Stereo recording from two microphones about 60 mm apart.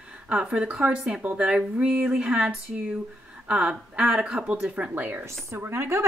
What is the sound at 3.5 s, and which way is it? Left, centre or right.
Speech, centre.